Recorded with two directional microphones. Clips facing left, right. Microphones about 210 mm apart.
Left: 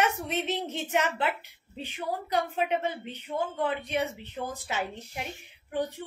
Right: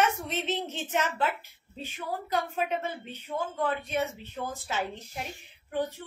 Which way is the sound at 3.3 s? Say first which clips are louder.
Left 1 dB; 15° left (ahead or behind).